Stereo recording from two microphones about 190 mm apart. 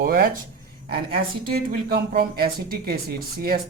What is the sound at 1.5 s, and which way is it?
Speech, 55° right (ahead or behind).